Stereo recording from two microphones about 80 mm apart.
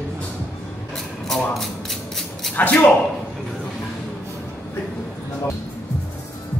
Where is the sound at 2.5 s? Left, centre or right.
Left.